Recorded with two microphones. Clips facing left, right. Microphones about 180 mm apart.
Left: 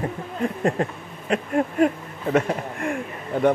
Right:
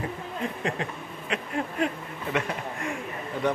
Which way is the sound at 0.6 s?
45° left (ahead or behind).